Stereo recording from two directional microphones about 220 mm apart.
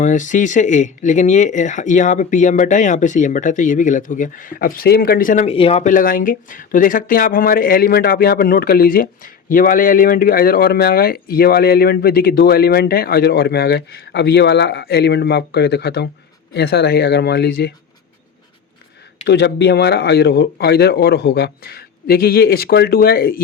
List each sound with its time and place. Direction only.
0.0 s speech: 35° left (ahead or behind)
19.2 s speech: 50° left (ahead or behind)